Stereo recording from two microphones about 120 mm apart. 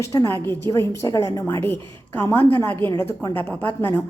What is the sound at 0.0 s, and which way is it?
A woman's voice, 25° left (ahead or behind).